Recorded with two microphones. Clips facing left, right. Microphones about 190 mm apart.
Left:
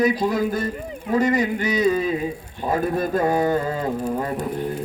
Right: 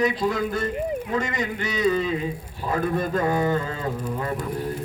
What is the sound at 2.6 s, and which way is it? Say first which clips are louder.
A man's voice: left 3 dB; 35° left (ahead or behind).